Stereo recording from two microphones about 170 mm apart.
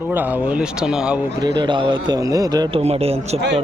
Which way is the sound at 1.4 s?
25° right (ahead or behind).